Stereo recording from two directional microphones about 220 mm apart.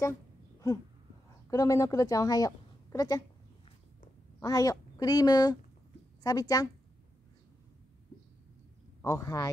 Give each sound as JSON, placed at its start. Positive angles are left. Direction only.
{"t": 1.5, "sound": "a woman's voice", "side_deg": 15}
{"t": 4.4, "sound": "a woman's voice", "side_deg": 15}
{"t": 9.0, "sound": "a woman's voice", "side_deg": 10}